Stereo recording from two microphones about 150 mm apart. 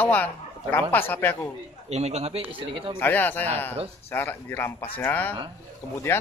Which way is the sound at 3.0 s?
10° left (ahead or behind).